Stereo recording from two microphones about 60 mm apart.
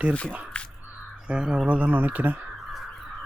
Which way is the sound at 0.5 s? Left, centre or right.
Centre.